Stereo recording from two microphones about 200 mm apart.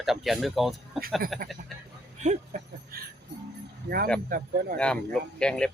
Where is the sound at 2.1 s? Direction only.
35° right (ahead or behind).